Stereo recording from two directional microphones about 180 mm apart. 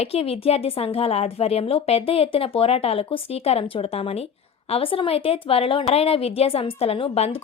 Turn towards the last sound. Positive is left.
turn(degrees=30)  # may be behind; listen again after turning